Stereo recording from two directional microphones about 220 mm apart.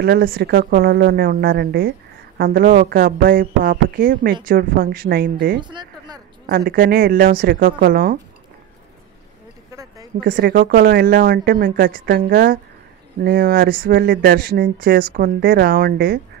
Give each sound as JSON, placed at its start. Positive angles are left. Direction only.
{"t": 0.0, "sound": "speech", "side_deg": -40}
{"t": 5.6, "sound": "a sound", "side_deg": -20}
{"t": 6.4, "sound": "speech", "side_deg": -40}
{"t": 10.2, "sound": "speech", "side_deg": -40}